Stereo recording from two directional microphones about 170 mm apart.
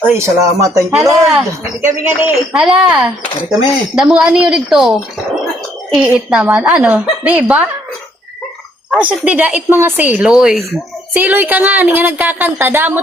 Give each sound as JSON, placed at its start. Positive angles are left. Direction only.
{"t": 0.3, "sound": "speech", "side_deg": -20}
{"t": 8.9, "sound": "speech", "side_deg": -10}